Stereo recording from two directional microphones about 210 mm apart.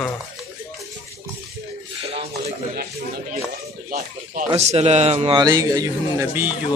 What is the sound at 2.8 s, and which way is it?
Speech, 50° right (ahead or behind).